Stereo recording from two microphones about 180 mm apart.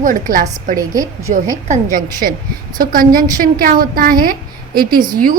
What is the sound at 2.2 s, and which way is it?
A woman's voice, 50° right (ahead or behind).